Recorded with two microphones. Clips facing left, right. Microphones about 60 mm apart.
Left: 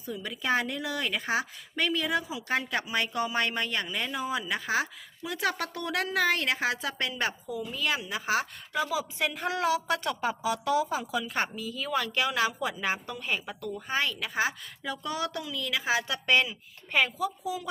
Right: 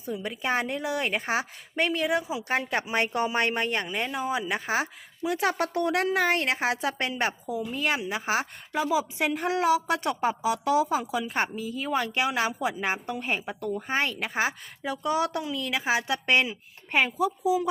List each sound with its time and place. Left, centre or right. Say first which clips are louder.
0.1 s a woman's voice: right 1 dB; right
3.8 s a woman's voice: right 3 dB; right